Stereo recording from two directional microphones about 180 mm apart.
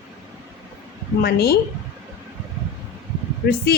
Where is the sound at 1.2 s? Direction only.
60° left (ahead or behind).